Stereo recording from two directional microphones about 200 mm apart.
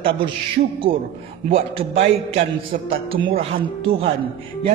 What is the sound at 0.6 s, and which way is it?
Speech, 35° right (ahead or behind).